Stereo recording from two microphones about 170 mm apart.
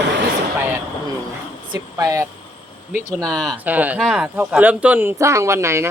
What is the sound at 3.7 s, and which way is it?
Speech, 10° right (ahead or behind).